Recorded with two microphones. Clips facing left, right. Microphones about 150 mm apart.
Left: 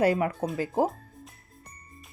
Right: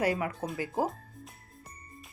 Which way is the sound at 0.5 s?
30° left (ahead or behind).